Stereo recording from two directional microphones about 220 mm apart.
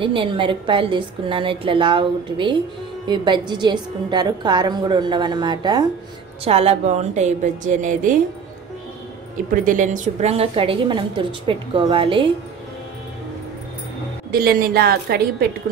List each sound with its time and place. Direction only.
0.0 s a woman's voice: 20° right (ahead or behind)
9.5 s a woman's voice: 35° right (ahead or behind)
14.3 s a woman's voice: 45° right (ahead or behind)